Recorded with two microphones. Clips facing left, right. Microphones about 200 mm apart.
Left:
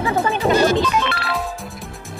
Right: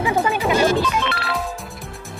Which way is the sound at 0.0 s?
15° right (ahead or behind).